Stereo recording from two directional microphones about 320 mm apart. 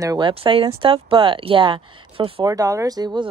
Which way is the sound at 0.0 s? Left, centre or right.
Centre.